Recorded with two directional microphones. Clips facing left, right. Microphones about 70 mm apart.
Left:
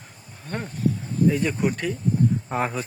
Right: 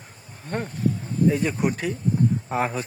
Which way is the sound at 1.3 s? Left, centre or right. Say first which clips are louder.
Even; centre.